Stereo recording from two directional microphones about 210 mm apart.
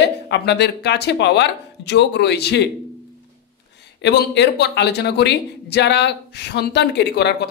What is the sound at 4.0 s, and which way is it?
Speech, 55° left (ahead or behind).